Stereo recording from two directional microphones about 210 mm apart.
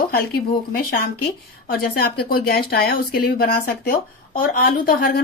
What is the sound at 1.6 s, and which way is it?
Speech, 45° left (ahead or behind).